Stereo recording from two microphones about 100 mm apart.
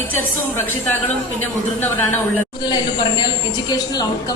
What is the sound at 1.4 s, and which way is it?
Speech, 20° left (ahead or behind).